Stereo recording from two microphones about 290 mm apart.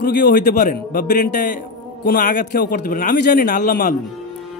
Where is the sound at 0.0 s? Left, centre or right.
Left.